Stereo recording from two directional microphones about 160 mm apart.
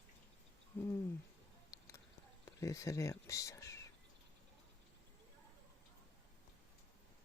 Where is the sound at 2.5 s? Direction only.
20° left (ahead or behind).